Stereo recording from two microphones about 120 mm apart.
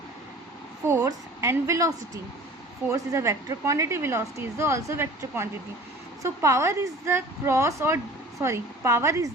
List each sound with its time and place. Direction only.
1.0 s a woman's voice: 25° right (ahead or behind)
2.9 s a woman's voice: 25° right (ahead or behind)